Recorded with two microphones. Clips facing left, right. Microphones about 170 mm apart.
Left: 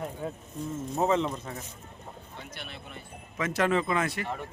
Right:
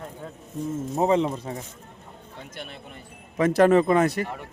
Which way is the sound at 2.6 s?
45° right (ahead or behind).